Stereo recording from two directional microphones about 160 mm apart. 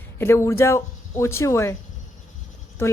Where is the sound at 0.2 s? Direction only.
15° left (ahead or behind).